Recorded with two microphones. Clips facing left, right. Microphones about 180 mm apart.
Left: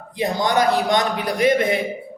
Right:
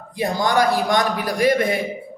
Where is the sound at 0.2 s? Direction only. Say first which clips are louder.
Even; 20° left (ahead or behind).